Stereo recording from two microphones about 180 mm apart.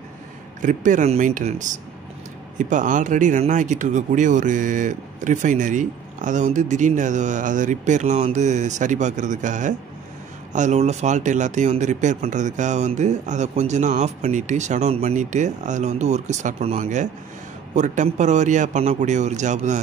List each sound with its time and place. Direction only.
0.6 s speech: 45° right (ahead or behind)